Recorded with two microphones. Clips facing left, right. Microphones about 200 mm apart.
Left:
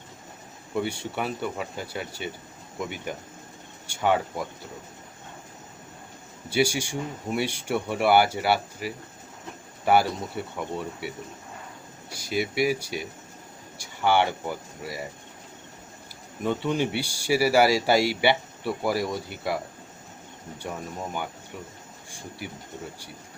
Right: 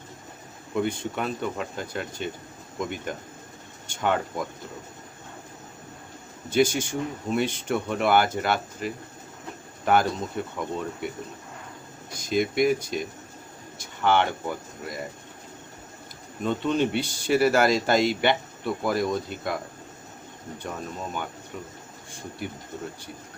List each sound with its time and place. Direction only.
0.8 s speech: 10° left (ahead or behind)
6.5 s speech: 10° left (ahead or behind)
16.4 s speech: 10° left (ahead or behind)
20.6 s speech: 10° left (ahead or behind)